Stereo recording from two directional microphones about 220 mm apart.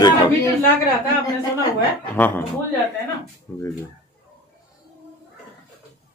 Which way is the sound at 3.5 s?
10° left (ahead or behind).